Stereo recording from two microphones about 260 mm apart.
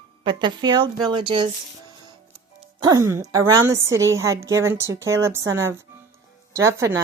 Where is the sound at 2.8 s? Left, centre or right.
Centre.